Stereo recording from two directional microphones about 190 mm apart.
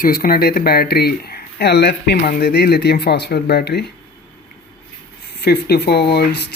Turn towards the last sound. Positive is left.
turn(degrees=60)  # may be behind; listen again after turning